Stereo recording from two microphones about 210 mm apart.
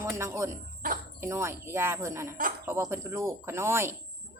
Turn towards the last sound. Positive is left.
turn(degrees=-10)  # may be behind; listen again after turning